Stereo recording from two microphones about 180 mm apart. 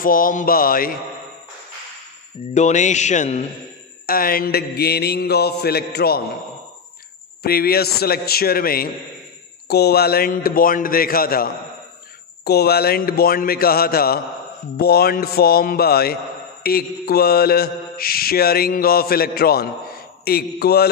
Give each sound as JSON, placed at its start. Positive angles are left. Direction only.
{"t": 0.0, "sound": "music", "side_deg": 50}
{"t": 2.5, "sound": "speech", "side_deg": 40}
{"t": 4.0, "sound": "mantra", "side_deg": 55}
{"t": 7.4, "sound": "mantra", "side_deg": 60}